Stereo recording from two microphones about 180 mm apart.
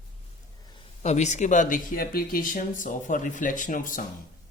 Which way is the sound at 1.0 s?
40° left (ahead or behind).